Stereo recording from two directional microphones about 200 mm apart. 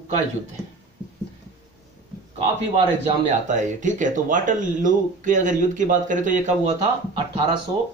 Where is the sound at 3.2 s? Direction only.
35° right (ahead or behind).